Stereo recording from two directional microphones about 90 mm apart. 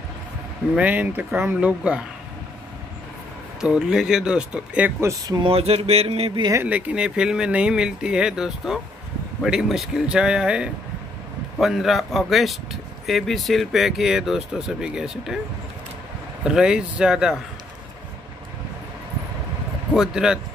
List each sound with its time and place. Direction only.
0.7 s speech: 20° right (ahead or behind)
1.6 s speech: 10° right (ahead or behind)
3.6 s speech: 10° right (ahead or behind)
5.4 s a sound: 90° right
6.6 s speech: 15° right (ahead or behind)
16.4 s speech: 10° right (ahead or behind)
19.9 s speech: 5° right (ahead or behind)